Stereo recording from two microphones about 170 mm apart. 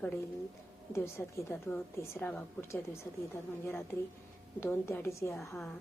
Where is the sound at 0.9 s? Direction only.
15° left (ahead or behind).